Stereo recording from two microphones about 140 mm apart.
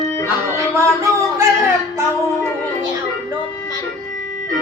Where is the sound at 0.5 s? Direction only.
20° right (ahead or behind).